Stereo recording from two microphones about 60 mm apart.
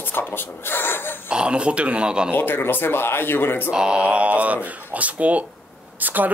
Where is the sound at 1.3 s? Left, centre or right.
Centre.